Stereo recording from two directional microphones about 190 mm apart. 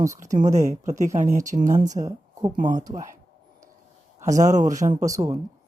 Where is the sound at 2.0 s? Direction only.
15° right (ahead or behind).